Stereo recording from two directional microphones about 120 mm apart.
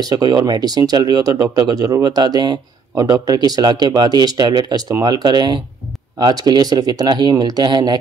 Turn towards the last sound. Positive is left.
turn(degrees=-35)  # may be behind; listen again after turning